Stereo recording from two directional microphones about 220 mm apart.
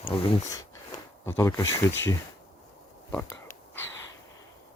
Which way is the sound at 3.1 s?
10° left (ahead or behind).